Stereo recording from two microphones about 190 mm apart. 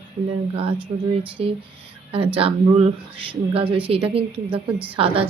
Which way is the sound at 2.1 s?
30° right (ahead or behind).